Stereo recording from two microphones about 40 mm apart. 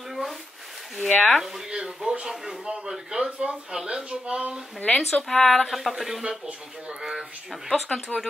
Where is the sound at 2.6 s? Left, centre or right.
Centre.